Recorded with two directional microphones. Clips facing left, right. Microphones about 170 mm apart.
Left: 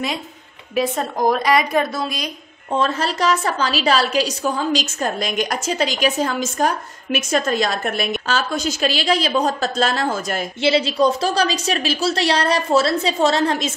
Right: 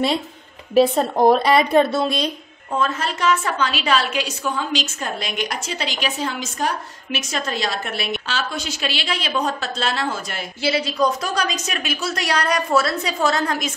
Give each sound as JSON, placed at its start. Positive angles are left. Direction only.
{"t": 0.7, "sound": "a woman's voice", "side_deg": -30}
{"t": 2.8, "sound": "a woman's voice", "side_deg": 35}
{"t": 10.6, "sound": "a woman's voice", "side_deg": 25}